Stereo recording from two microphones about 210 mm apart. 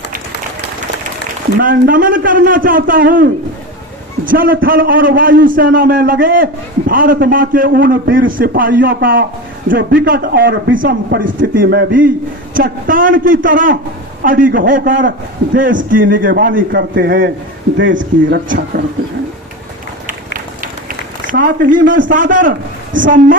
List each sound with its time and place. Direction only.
1.6 s a man's voice: 40° right (ahead or behind)
4.3 s a man's voice: 45° right (ahead or behind)
21.2 s a man's voice: 40° right (ahead or behind)